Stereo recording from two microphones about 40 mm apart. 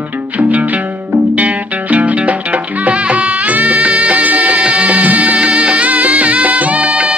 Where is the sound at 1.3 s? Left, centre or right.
Right.